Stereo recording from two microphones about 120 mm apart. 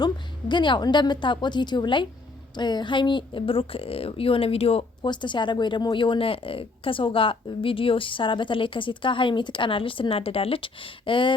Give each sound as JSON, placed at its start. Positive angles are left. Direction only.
{"t": 0.0, "sound": "a woman's voice", "side_deg": 40}
{"t": 5.0, "sound": "a woman's voice", "side_deg": 40}